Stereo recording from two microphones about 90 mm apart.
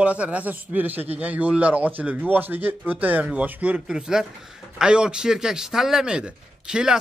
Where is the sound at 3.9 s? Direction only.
5° right (ahead or behind).